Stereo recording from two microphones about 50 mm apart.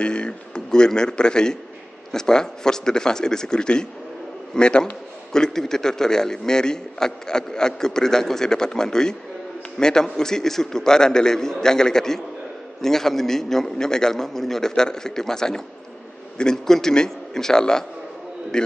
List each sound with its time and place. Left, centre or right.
0.0 s a man's voice: centre